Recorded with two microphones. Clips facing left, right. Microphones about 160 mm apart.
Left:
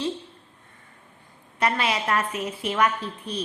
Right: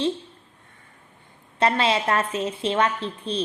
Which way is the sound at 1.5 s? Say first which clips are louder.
Right 3 dB; 30° right (ahead or behind).